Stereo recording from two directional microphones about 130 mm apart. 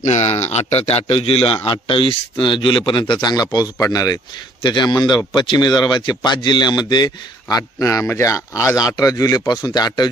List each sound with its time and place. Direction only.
0.0 s a man's voice: 60° left (ahead or behind); by 10.0 s 30° left (ahead or behind)